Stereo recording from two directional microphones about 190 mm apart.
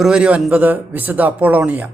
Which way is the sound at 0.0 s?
5° right (ahead or behind).